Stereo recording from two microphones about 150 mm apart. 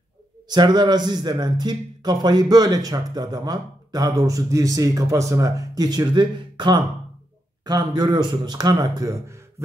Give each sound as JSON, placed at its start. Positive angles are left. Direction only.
{"t": 0.5, "sound": "speech", "side_deg": -30}